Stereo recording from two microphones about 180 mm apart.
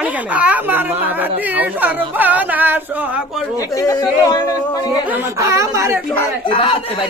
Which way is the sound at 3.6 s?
20° left (ahead or behind).